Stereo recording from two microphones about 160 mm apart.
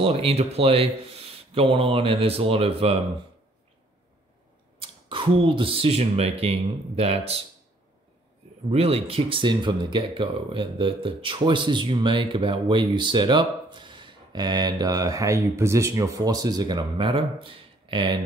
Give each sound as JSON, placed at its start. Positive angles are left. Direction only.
{"t": 0.0, "sound": "speech", "side_deg": -35}
{"t": 4.7, "sound": "speech", "side_deg": -30}
{"t": 8.6, "sound": "speech", "side_deg": -40}